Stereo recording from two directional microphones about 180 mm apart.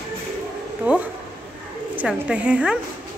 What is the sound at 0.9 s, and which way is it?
A woman's voice, 10° right (ahead or behind).